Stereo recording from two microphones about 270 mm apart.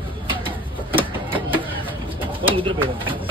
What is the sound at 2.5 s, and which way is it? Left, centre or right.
Speech, centre.